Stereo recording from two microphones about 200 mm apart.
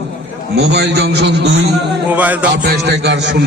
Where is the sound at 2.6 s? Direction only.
55° right (ahead or behind).